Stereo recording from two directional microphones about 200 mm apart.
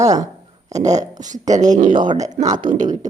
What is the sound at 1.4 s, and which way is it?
Speech, 35° right (ahead or behind).